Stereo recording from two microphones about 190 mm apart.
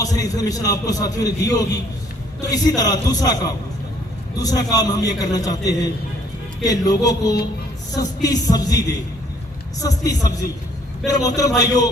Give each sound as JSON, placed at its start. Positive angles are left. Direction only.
{"t": 0.0, "sound": "a man's voice", "side_deg": 20}